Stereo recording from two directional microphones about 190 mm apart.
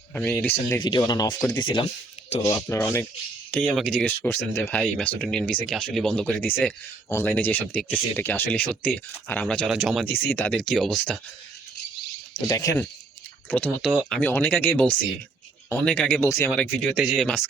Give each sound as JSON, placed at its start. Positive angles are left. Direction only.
{"t": 0.1, "sound": "speech", "side_deg": 5}
{"t": 0.8, "sound": "speech", "side_deg": 20}
{"t": 2.6, "sound": "speech", "side_deg": 10}
{"t": 3.5, "sound": "speech", "side_deg": 0}
{"t": 12.5, "sound": "speech", "side_deg": 15}
{"t": 16.6, "sound": "speech", "side_deg": 0}